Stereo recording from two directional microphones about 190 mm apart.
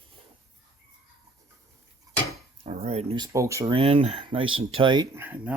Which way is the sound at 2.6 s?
35° right (ahead or behind).